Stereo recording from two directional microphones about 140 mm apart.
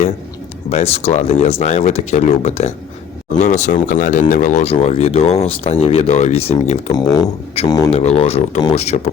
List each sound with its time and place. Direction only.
0.7 s speech: 45° left (ahead or behind)
4.7 s speech: 50° left (ahead or behind)
6.9 s speech: 25° left (ahead or behind)
7.6 s speech: 45° left (ahead or behind)